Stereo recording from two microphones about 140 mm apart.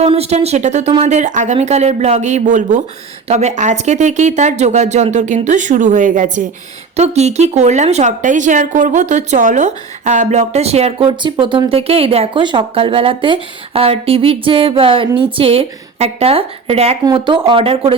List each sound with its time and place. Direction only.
0.0 s speech: 45° right (ahead or behind); by 2.8 s 65° right (ahead or behind)
3.2 s speech: 55° right (ahead or behind)
6.9 s speech: 50° right (ahead or behind)